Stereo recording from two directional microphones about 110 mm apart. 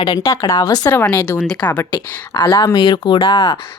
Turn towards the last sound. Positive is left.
turn(degrees=40)  # may be behind; listen again after turning